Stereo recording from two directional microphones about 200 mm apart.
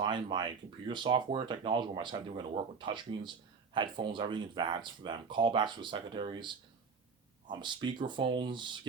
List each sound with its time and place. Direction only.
0.0 s speech: 25° right (ahead or behind)